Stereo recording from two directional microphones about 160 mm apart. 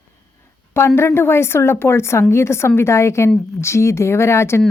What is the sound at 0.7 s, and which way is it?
A woman's voice, 15° left (ahead or behind).